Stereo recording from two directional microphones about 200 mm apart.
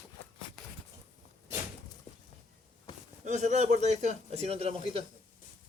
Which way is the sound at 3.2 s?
35° right (ahead or behind).